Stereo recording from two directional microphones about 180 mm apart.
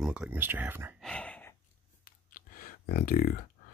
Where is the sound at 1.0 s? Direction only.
5° left (ahead or behind).